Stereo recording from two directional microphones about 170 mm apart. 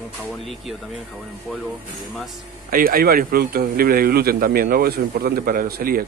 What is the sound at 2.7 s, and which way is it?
Speech, 60° right (ahead or behind).